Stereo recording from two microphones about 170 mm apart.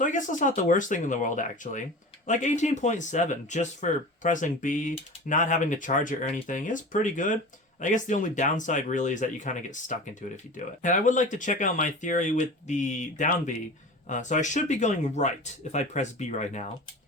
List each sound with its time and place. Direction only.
0.0 s speech: 50° left (ahead or behind)